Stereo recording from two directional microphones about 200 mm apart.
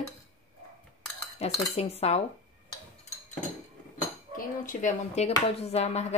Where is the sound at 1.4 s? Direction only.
30° left (ahead or behind).